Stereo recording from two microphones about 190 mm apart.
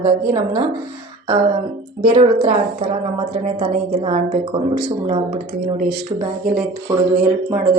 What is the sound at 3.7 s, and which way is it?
A woman's voice, 40° right (ahead or behind).